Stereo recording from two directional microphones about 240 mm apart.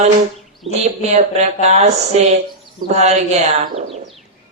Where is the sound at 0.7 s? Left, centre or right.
Right.